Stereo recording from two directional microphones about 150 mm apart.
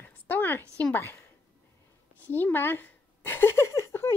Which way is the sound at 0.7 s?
10° left (ahead or behind).